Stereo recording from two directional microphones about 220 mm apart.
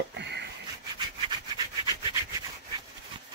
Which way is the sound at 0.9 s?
20° right (ahead or behind).